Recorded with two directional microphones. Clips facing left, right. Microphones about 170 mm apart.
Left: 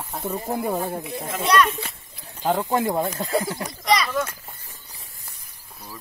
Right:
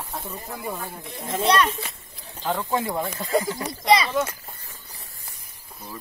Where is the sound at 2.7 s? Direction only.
45° left (ahead or behind).